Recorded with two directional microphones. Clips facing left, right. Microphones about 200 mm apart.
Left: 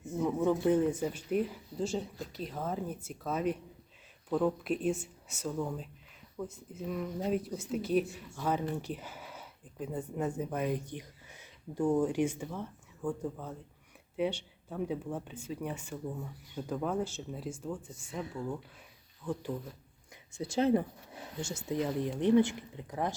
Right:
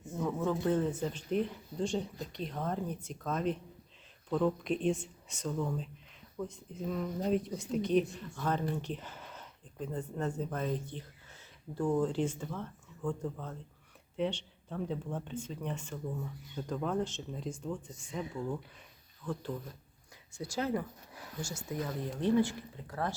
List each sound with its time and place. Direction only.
0.2 s speech: 15° left (ahead or behind)
19.2 s speech: 15° left (ahead or behind)
20.4 s speech: 25° left (ahead or behind)